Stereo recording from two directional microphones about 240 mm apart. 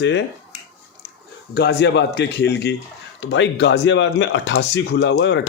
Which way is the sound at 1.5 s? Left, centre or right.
Left.